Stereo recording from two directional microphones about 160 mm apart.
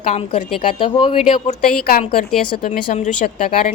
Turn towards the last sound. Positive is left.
turn(degrees=50)  # may be behind; listen again after turning